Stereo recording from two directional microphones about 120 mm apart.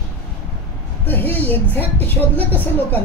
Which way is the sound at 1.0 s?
15° left (ahead or behind).